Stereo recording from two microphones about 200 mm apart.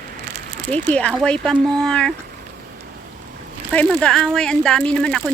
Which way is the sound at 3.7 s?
5° left (ahead or behind).